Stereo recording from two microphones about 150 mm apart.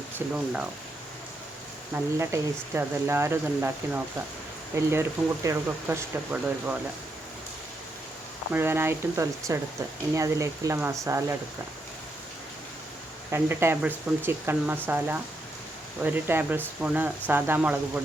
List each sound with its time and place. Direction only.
1.9 s speech: 15° right (ahead or behind)
8.5 s speech: 15° right (ahead or behind)
13.3 s speech: 15° right (ahead or behind)